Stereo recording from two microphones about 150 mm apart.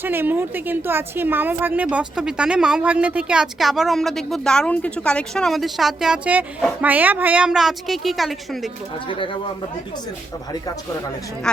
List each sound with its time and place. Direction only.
0.0 s a woman's voice: 15° right (ahead or behind)
9.0 s speech: 35° left (ahead or behind)
11.5 s a woman's voice: 5° left (ahead or behind)